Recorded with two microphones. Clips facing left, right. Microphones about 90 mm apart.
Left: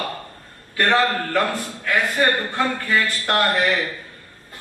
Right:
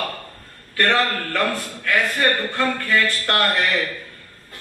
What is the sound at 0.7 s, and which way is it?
A man's voice, 20° left (ahead or behind).